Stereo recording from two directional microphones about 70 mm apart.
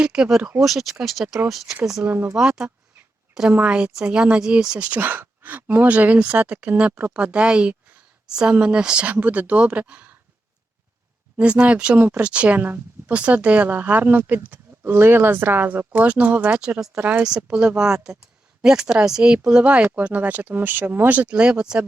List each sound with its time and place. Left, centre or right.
0.0 s speech: centre
2.0 s speech: right
2.4 s speech: centre
4.9 s speech: right
11.3 s speech: centre
17.2 s speech: centre